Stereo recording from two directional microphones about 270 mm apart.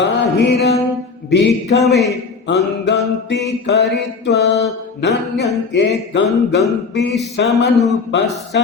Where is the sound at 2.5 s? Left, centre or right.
Left.